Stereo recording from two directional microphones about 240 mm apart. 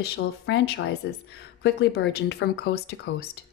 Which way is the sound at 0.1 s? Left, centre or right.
Left.